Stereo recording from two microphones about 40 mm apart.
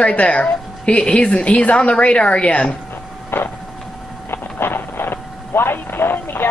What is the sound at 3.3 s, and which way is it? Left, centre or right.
Vehicle, left.